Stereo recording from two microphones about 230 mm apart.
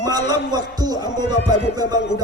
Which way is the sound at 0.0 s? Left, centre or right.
Centre.